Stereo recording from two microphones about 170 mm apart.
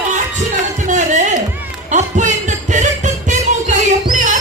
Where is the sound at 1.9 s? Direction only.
45° right (ahead or behind).